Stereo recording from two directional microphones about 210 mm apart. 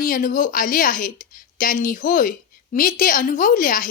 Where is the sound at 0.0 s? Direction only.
40° left (ahead or behind).